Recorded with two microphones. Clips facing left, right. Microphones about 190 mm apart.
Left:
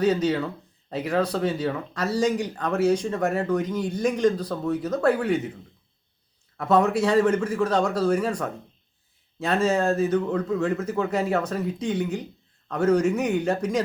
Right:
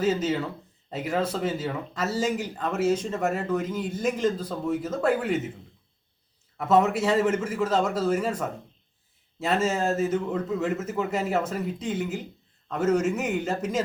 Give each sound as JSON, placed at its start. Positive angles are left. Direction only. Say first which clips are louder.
{"t": 0.0, "sound": "speech", "louder": "left 3 dB", "side_deg": 0}
{"t": 6.6, "sound": "speech", "louder": "left 1 dB", "side_deg": -5}
{"t": 9.6, "sound": "speech", "louder": "left 3 dB", "side_deg": -5}